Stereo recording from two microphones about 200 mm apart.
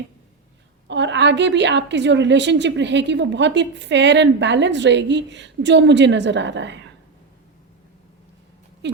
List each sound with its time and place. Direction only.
0.9 s a woman's voice: 60° right (ahead or behind)
8.8 s a woman's voice: 60° right (ahead or behind)